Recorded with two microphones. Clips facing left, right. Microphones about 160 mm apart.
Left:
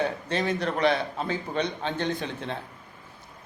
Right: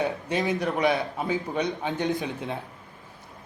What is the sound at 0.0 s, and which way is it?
A man's voice, 15° right (ahead or behind).